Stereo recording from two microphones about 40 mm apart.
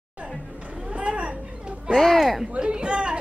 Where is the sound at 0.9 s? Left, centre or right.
Right.